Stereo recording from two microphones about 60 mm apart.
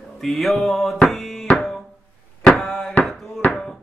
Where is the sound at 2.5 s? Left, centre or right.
Centre.